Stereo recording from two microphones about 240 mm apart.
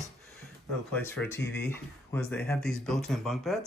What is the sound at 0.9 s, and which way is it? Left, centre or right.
Speech, centre.